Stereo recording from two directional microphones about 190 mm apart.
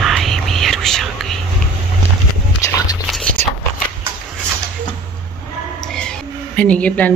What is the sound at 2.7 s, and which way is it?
Whispering, 20° left (ahead or behind).